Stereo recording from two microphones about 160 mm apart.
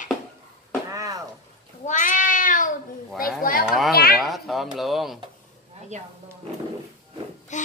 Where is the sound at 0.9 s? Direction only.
20° right (ahead or behind).